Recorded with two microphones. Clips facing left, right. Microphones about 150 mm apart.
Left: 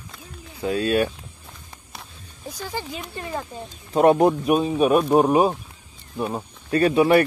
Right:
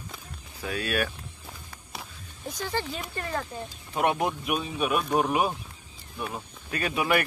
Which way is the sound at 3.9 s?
35° left (ahead or behind).